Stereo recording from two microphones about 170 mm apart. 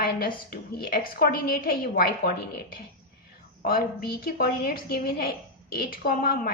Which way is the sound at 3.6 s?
60° left (ahead or behind).